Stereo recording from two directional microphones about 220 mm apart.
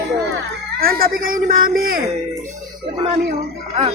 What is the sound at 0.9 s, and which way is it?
Speech, 40° right (ahead or behind).